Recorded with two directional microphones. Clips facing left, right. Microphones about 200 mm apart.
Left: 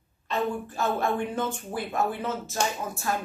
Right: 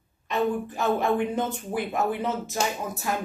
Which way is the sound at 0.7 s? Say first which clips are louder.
Right 3 dB; 15° right (ahead or behind).